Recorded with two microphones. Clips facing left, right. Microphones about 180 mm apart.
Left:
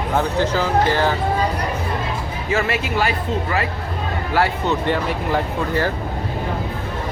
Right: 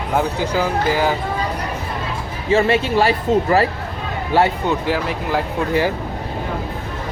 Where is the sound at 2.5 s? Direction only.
30° right (ahead or behind).